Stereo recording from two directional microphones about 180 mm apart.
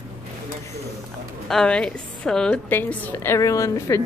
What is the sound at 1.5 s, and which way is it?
A woman's voice, 5° left (ahead or behind).